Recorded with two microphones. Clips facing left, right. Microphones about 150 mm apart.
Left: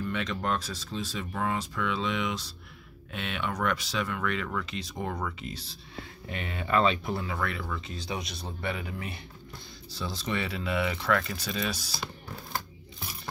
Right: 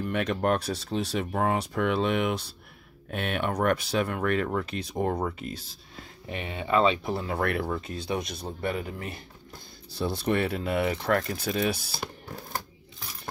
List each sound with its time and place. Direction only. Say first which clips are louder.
0.0 s speech: right 5 dB; 60° right (ahead or behind)
6.5 s speech: right 2 dB; 25° right (ahead or behind)
7.6 s speech: right 5 dB; 50° right (ahead or behind)
9.9 s speech: right 6 dB; 60° right (ahead or behind)